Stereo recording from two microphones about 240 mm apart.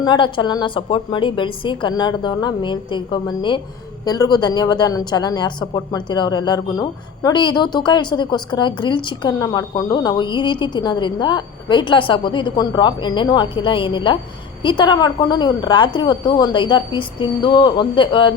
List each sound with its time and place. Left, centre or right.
0.0 s a woman's voice: centre